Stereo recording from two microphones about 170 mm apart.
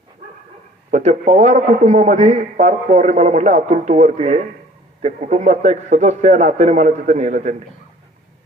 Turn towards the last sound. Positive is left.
turn(degrees=-45)  # may be behind; listen again after turning